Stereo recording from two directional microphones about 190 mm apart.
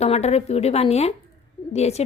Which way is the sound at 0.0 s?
35° left (ahead or behind).